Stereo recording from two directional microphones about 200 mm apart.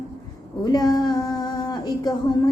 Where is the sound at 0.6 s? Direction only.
20° left (ahead or behind).